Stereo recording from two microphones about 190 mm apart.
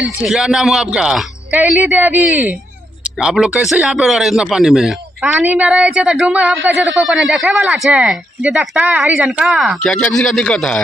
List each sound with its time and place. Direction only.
0.0 s a man's voice: 5° right (ahead or behind)